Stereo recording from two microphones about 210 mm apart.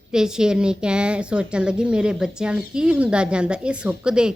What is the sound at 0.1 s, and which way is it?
A woman's voice, 5° right (ahead or behind).